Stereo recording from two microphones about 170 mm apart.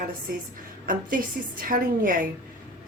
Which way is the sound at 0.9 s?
55° right (ahead or behind).